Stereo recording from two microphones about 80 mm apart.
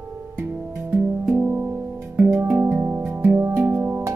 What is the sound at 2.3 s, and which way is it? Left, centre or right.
Music, right.